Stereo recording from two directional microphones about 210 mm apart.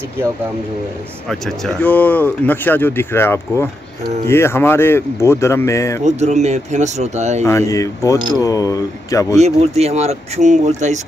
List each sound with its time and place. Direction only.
1.3 s speech: 10° left (ahead or behind)
6.0 s speech: 35° right (ahead or behind)
7.4 s speech: 15° left (ahead or behind)
9.4 s speech: 30° right (ahead or behind)